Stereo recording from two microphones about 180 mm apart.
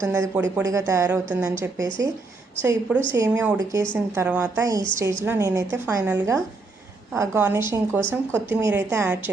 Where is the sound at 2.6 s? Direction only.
15° right (ahead or behind).